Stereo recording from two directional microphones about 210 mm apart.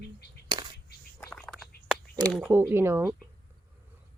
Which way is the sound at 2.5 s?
10° right (ahead or behind).